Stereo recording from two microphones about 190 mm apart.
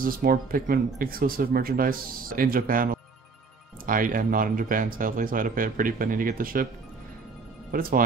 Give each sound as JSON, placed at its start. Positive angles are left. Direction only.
{"t": 0.0, "sound": "speech", "side_deg": -50}
{"t": 7.7, "sound": "speech", "side_deg": -50}